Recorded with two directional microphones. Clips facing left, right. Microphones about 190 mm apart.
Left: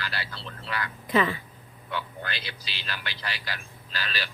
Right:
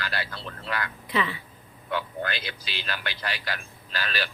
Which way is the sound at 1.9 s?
50° right (ahead or behind).